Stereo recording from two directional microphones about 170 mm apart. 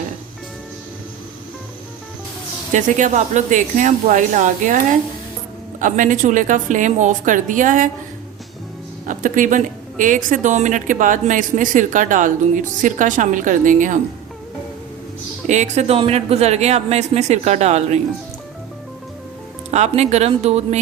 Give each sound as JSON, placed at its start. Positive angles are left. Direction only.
{"t": 2.7, "sound": "speech", "side_deg": -45}
{"t": 9.0, "sound": "speech", "side_deg": -50}
{"t": 15.4, "sound": "speech", "side_deg": -45}
{"t": 19.7, "sound": "speech", "side_deg": -40}